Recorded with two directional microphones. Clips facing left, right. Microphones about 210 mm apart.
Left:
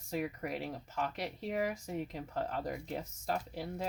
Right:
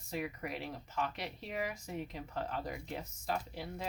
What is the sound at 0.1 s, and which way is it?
Speech, 45° left (ahead or behind).